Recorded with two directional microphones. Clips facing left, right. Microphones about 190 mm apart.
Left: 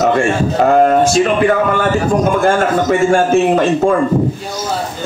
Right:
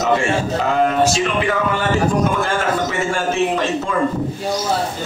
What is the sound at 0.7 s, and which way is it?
A man's voice, 50° left (ahead or behind).